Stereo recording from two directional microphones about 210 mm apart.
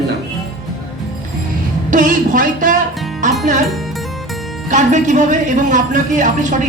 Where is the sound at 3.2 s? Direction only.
35° right (ahead or behind).